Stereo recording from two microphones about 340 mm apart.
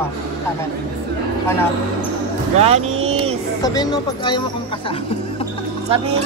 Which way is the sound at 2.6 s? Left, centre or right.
Centre.